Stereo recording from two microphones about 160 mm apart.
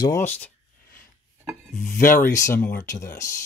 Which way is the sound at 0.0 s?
15° left (ahead or behind).